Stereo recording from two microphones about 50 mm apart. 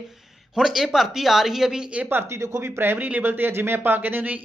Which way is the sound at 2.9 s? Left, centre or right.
Right.